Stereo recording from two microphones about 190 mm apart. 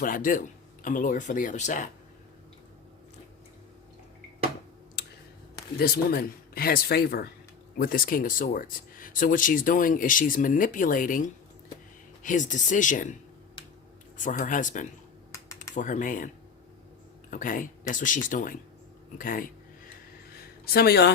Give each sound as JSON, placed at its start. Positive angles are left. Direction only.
{"t": 0.0, "sound": "speech", "side_deg": 45}
{"t": 5.8, "sound": "speech", "side_deg": 55}
{"t": 14.2, "sound": "speech", "side_deg": 45}
{"t": 17.3, "sound": "speech", "side_deg": 45}
{"t": 20.3, "sound": "a sound", "side_deg": 55}